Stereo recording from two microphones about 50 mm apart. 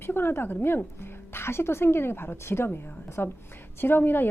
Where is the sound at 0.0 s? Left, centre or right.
Left.